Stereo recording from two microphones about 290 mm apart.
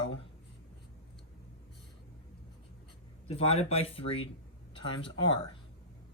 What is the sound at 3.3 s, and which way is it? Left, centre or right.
Speech, left.